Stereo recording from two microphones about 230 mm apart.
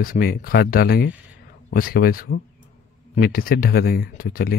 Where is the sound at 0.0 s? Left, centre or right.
Left.